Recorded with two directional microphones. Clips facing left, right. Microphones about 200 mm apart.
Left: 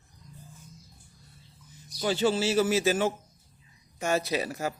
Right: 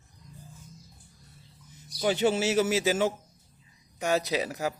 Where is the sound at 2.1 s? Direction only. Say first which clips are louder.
Left 1 dB; 20° right (ahead or behind).